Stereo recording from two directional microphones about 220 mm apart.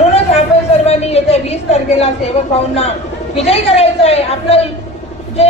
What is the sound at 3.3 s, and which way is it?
A woman's voice, 25° left (ahead or behind).